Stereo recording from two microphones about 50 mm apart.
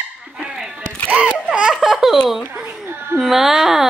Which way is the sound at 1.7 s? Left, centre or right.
Centre.